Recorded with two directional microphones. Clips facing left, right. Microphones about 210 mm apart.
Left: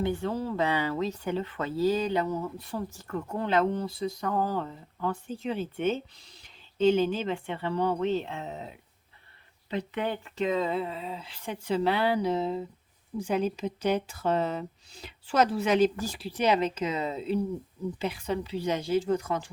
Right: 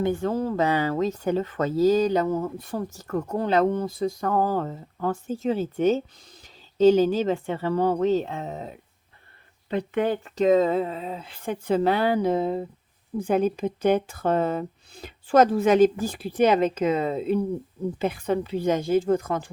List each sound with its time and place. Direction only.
0.0 s speech: 45° right (ahead or behind)